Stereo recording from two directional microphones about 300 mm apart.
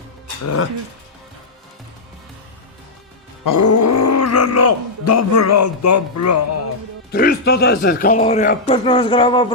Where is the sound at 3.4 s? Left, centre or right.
Left.